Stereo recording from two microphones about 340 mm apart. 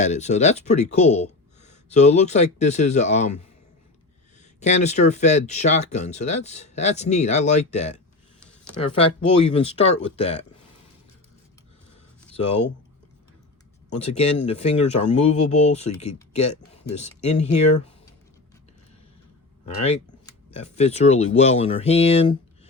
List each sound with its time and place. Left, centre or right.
0.0 s speech: centre
4.6 s speech: centre
13.9 s speech: centre
19.8 s speech: centre